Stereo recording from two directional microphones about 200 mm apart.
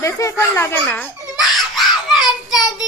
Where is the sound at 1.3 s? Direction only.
Centre (ahead or behind).